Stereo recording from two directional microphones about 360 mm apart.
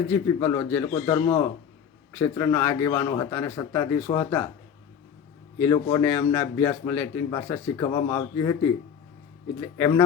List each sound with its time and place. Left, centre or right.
0.1 s a man's voice: centre
5.5 s a man's voice: centre
9.6 s a man's voice: centre